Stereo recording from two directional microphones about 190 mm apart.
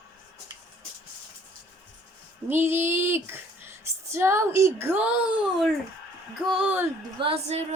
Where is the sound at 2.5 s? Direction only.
10° right (ahead or behind).